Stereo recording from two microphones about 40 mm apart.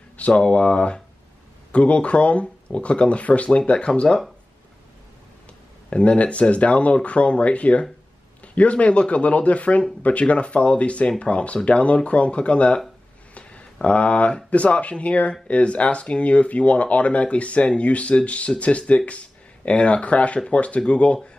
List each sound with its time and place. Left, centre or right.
0.3 s speech: left
5.9 s speech: left
13.3 s a sound: left
14.3 s speech: left